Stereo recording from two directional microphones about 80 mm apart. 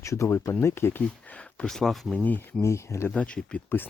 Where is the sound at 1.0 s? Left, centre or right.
Centre.